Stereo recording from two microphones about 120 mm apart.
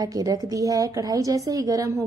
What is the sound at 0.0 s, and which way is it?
A woman's voice, 30° right (ahead or behind).